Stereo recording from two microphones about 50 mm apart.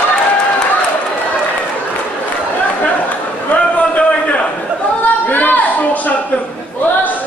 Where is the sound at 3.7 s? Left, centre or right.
Left.